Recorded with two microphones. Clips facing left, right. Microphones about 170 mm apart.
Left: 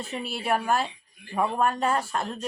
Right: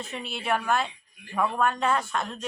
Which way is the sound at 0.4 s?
35° left (ahead or behind).